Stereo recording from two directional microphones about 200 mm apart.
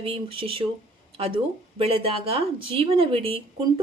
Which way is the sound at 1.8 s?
30° right (ahead or behind).